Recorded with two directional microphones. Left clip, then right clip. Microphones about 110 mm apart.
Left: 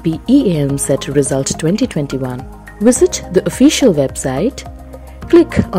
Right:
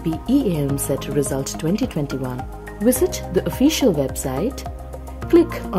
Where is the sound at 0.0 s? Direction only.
35° left (ahead or behind).